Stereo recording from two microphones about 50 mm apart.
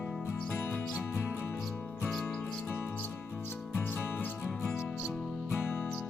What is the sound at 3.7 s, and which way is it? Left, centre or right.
Music, left.